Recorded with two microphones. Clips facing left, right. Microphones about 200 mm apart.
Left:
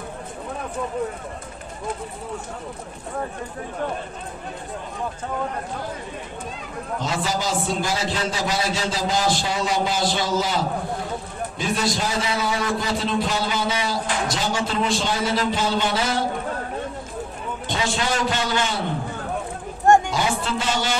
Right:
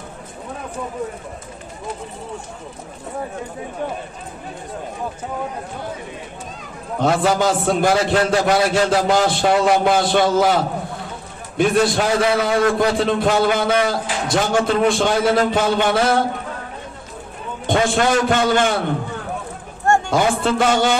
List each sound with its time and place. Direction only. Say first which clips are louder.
7.0 s a man's voice: right 10 dB; 60° right (ahead or behind)
17.6 s a man's voice: right 8 dB; 55° right (ahead or behind)
20.1 s a man's voice: right 6 dB; 55° right (ahead or behind)